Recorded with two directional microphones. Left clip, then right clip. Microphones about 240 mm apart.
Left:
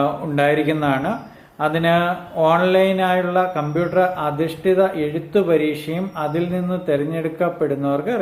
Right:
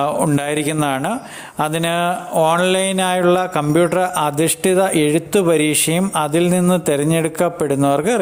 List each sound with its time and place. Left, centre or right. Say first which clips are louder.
0.0 s speech: right 1 dB; right